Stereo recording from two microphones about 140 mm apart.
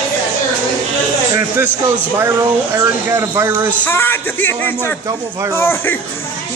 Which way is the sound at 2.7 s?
20° right (ahead or behind).